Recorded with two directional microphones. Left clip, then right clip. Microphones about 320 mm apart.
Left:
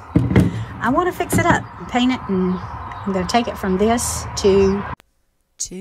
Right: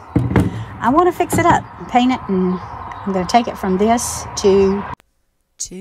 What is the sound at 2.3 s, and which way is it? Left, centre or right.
Speech, right.